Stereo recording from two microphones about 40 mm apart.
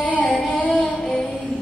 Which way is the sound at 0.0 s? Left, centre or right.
Centre.